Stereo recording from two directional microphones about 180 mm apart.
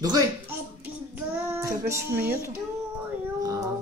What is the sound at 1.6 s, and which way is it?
Speech, 15° right (ahead or behind).